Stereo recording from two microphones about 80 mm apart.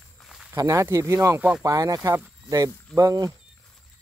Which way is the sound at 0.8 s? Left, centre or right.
Right.